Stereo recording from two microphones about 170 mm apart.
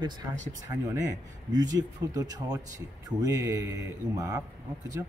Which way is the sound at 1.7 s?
20° right (ahead or behind).